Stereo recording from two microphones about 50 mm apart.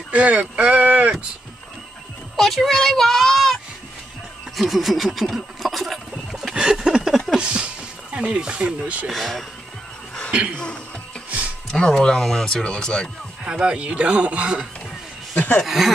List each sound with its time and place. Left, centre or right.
0.1 s speech: right
2.3 s speech: centre
4.6 s a sound: centre
6.5 s a sound: centre
7.3 s speech: right
9.1 s speech: centre
10.5 s speech: centre
13.4 s speech: centre
15.6 s speech: centre